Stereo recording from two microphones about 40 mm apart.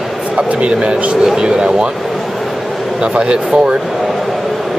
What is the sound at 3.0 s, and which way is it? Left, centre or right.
Speech, right.